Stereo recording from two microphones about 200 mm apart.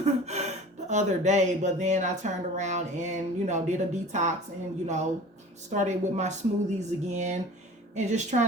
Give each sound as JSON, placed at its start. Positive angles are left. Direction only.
{"t": 0.0, "sound": "speech", "side_deg": -35}
{"t": 5.7, "sound": "speech", "side_deg": -35}